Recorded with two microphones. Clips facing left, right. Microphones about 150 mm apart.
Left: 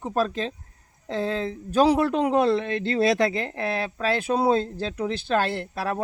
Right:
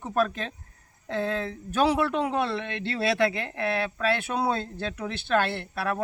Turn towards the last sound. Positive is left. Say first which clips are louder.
# left 2 dB
turn(degrees=35)  # may be behind; listen again after turning